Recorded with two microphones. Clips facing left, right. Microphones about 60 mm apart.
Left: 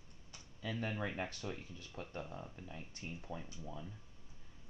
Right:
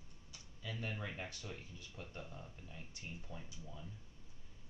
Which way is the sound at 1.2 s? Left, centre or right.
Left.